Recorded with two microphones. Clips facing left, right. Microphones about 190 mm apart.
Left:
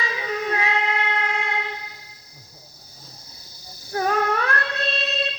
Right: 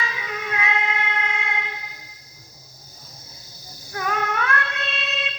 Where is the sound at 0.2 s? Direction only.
35° left (ahead or behind).